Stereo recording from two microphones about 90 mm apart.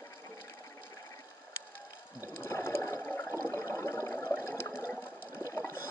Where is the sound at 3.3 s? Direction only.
30° left (ahead or behind).